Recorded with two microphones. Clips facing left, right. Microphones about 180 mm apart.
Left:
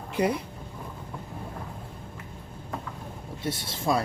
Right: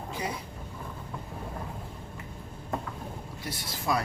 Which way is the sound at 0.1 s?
60° left (ahead or behind).